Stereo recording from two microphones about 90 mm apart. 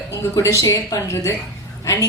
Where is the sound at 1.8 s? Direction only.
40° left (ahead or behind).